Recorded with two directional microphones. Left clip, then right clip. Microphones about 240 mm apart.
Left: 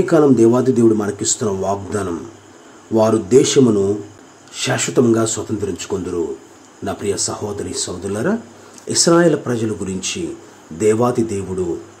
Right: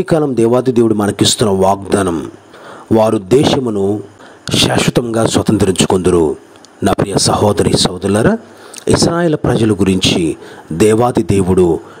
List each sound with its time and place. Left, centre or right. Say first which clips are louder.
0.0 s speech: left 1 dB; right